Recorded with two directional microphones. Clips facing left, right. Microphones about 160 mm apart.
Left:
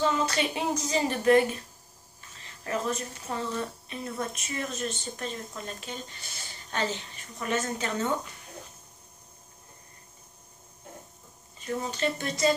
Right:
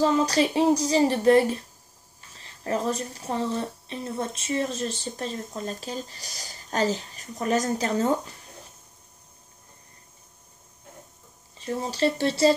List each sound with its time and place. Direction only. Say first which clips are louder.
0.0 s speech: right 5 dB; 35° right (ahead or behind)
11.5 s speech: right 2 dB; 30° right (ahead or behind)